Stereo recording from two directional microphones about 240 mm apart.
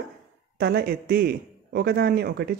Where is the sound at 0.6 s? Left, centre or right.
Right.